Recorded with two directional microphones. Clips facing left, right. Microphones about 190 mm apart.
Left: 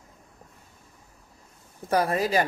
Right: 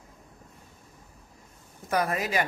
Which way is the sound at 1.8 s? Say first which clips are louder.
Left 4 dB; 30° left (ahead or behind).